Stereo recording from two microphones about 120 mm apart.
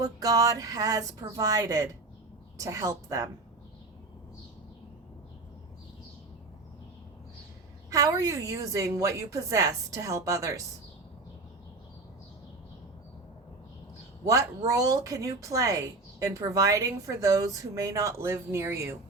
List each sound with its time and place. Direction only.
0.0 s speech: 30° right (ahead or behind)
7.9 s speech: 30° right (ahead or behind)
14.3 s speech: 30° right (ahead or behind)